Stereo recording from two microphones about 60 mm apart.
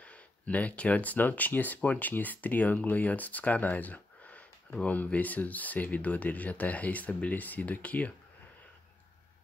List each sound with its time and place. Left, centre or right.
0.0 s speech: left